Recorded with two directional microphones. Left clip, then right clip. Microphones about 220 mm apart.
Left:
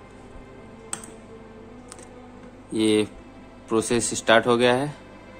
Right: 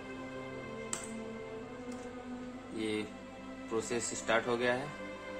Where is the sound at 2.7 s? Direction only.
40° left (ahead or behind).